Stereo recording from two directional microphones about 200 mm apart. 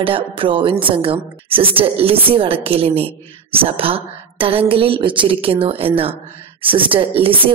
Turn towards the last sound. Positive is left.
turn(degrees=-25)  # may be behind; listen again after turning